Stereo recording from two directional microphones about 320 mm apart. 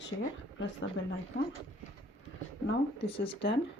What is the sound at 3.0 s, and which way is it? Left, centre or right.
Speech, centre.